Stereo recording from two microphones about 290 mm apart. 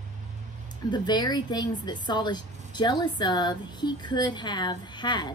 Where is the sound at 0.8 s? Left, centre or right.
Centre.